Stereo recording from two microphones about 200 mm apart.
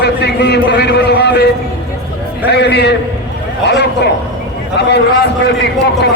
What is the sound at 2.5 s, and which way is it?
A man's voice, 55° left (ahead or behind).